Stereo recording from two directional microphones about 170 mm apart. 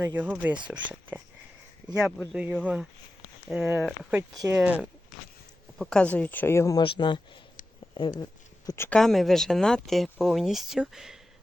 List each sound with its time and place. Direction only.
0.0 s speech: 10° right (ahead or behind)
5.8 s speech: 5° left (ahead or behind)
6.8 s speech: 30° left (ahead or behind)
7.6 s a sound: 50° left (ahead or behind)
7.9 s speech: 25° left (ahead or behind)
9.0 s speech: centre (ahead or behind)